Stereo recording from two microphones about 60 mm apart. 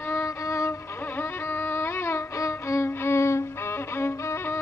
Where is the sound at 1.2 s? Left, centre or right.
Left.